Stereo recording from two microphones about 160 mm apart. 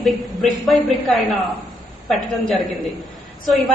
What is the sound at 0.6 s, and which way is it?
Speech, centre (ahead or behind).